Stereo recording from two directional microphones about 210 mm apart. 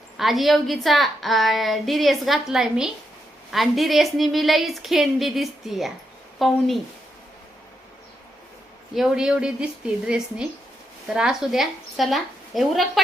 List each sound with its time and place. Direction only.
0.2 s a woman's voice: centre (ahead or behind)
9.0 s a woman's voice: 5° right (ahead or behind)